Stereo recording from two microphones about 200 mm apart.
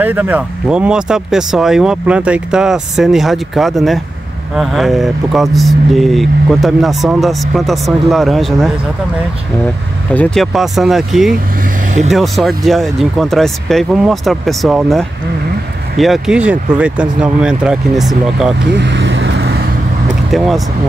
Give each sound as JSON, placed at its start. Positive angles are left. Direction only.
{"t": 0.0, "sound": "speech", "side_deg": -10}
{"t": 10.1, "sound": "speech", "side_deg": 5}
{"t": 18.7, "sound": "vehicle", "side_deg": -60}
{"t": 20.2, "sound": "speech", "side_deg": 0}